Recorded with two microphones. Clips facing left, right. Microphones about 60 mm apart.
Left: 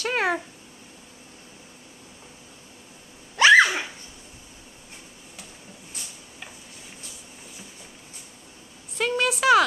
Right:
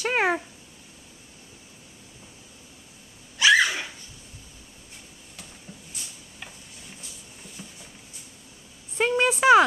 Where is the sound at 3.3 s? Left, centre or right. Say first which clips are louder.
Left 4 dB; left.